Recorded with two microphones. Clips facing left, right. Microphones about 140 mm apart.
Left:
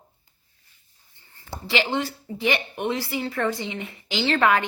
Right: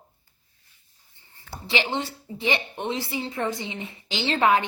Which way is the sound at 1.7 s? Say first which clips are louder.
Left 2 dB; 20° right (ahead or behind).